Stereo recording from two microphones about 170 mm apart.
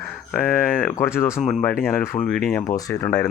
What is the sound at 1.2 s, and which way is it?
Speech, 15° left (ahead or behind).